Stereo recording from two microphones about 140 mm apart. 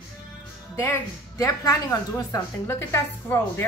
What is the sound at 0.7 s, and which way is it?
A woman's voice, 20° left (ahead or behind).